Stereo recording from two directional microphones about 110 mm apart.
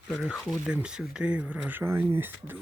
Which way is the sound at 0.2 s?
Centre (ahead or behind).